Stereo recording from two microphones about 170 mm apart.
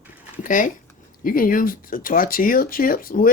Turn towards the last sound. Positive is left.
turn(degrees=55)  # may be behind; listen again after turning